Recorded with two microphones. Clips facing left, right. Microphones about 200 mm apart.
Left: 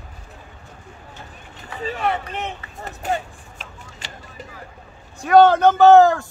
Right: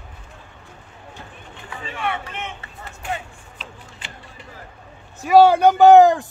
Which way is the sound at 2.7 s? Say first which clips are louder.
Left 5 dB; 40° left (ahead or behind).